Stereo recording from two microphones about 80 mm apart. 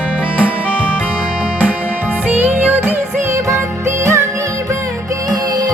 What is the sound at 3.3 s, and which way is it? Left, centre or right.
Music, right.